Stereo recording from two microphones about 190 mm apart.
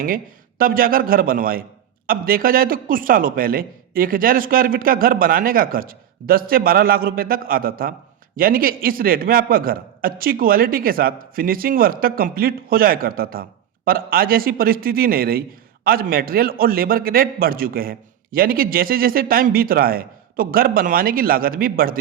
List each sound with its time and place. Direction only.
0.6 s speech: 50° right (ahead or behind)